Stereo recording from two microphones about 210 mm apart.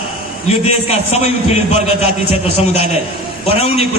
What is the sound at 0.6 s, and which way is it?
A man's voice, 30° left (ahead or behind).